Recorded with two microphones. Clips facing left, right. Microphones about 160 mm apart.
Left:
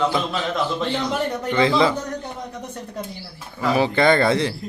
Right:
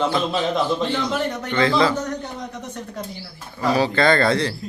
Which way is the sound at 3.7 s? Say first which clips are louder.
Left 1 dB; 20° left (ahead or behind).